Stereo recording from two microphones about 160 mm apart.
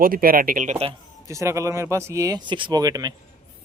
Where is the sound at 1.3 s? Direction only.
20° right (ahead or behind).